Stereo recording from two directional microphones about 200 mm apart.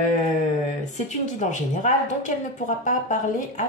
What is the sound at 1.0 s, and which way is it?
Speech, 35° left (ahead or behind).